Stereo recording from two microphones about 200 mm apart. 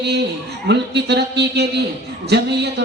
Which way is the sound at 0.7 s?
60° right (ahead or behind).